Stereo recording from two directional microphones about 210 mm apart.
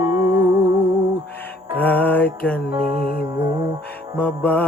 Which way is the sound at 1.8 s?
10° left (ahead or behind).